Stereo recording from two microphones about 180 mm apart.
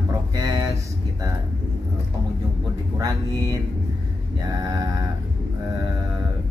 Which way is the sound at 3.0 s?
20° right (ahead or behind).